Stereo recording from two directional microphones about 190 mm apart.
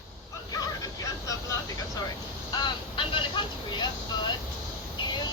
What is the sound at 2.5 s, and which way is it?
Vehicle, 25° left (ahead or behind).